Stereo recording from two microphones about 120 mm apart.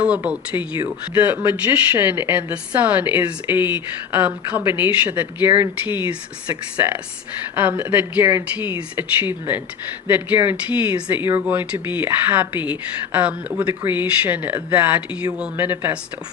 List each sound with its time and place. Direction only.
0.0 s speech: 10° right (ahead or behind)